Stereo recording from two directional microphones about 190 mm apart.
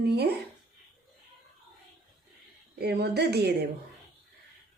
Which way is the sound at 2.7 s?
60° right (ahead or behind).